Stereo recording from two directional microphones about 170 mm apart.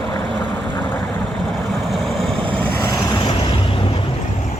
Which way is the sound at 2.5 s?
15° left (ahead or behind).